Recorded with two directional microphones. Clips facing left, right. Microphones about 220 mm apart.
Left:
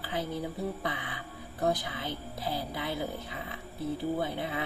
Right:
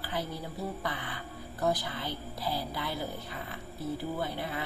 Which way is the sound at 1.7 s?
20° left (ahead or behind).